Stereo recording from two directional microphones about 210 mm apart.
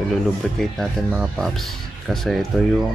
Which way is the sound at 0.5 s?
Centre (ahead or behind).